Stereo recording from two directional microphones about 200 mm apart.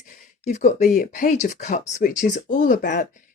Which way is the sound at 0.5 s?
35° left (ahead or behind).